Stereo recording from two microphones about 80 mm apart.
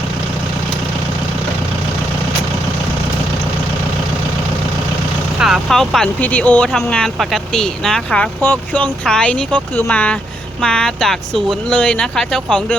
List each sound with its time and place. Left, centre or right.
5.4 s speech: centre
6.1 s speech: centre
6.9 s speech: centre